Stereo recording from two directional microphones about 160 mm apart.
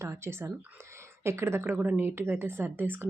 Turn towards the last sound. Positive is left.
turn(degrees=-15)  # may be behind; listen again after turning